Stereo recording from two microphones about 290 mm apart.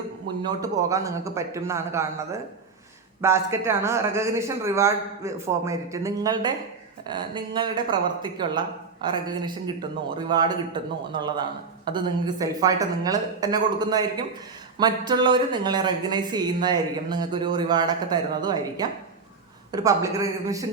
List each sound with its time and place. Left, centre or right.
0.4 s speech: centre